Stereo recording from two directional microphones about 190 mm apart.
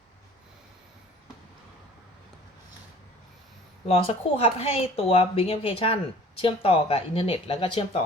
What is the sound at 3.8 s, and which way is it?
Speech, 30° left (ahead or behind).